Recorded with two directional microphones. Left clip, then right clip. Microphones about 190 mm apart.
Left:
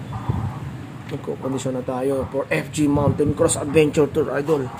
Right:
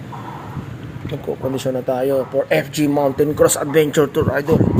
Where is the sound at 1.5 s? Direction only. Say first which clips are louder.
Right 7 dB; 10° right (ahead or behind).